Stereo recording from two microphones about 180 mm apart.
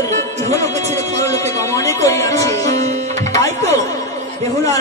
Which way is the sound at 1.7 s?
15° left (ahead or behind).